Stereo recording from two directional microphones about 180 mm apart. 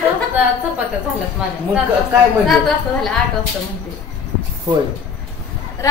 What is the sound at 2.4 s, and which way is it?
Speech, centre (ahead or behind).